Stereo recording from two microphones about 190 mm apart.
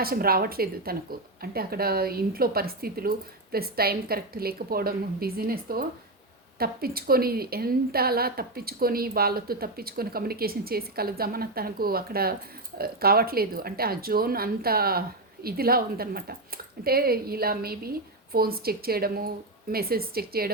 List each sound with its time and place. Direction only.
0.0 s a woman's voice: 50° right (ahead or behind)